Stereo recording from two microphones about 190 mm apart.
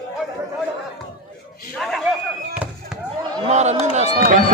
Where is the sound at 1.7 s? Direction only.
Centre (ahead or behind).